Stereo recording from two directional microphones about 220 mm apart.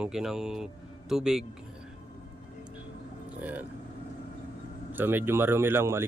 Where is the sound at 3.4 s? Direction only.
5° right (ahead or behind).